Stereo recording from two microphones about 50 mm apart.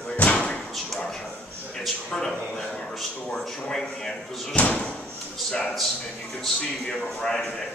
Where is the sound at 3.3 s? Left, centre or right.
Centre.